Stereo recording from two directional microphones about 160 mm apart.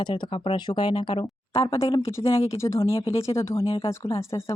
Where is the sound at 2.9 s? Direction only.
35° left (ahead or behind).